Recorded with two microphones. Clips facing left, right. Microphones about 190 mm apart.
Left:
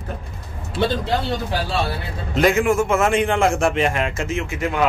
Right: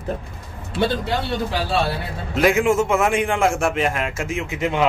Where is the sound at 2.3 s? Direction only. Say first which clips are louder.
Even; 5° right (ahead or behind).